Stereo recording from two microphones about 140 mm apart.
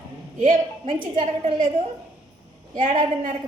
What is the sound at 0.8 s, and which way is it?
Speech, 40° right (ahead or behind).